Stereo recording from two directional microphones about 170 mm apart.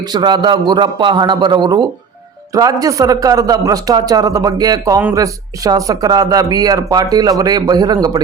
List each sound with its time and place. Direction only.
0.1 s speech: 25° right (ahead or behind)